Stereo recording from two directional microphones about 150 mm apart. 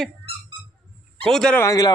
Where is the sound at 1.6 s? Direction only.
25° left (ahead or behind).